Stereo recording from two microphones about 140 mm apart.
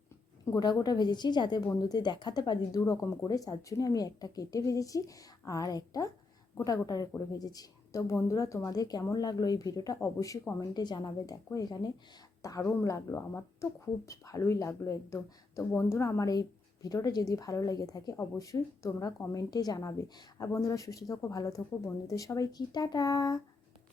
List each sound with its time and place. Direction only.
0.5 s a woman's voice: 30° left (ahead or behind)